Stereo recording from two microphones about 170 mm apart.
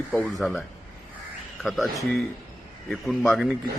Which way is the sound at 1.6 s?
Centre (ahead or behind).